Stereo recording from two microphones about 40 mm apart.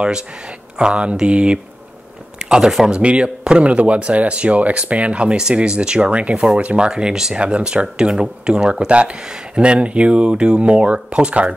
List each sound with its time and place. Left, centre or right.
0.7 s speech: right
2.5 s speech: centre
3.0 s speech: right
7.3 s speech: right